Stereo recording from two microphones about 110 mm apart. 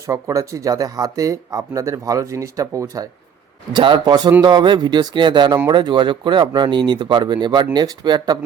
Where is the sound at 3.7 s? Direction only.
45° right (ahead or behind).